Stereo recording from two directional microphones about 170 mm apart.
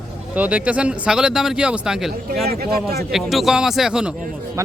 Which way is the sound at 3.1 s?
Centre (ahead or behind).